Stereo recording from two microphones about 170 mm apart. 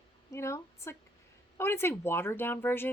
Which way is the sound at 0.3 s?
15° left (ahead or behind).